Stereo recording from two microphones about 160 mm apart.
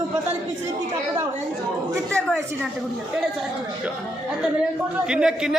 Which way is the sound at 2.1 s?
5° left (ahead or behind).